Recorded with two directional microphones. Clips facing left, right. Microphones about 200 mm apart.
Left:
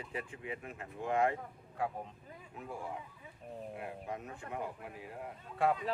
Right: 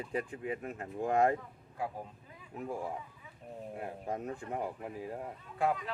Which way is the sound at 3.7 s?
40° right (ahead or behind).